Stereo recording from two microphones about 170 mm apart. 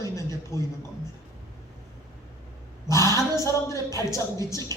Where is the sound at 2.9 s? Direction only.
20° left (ahead or behind).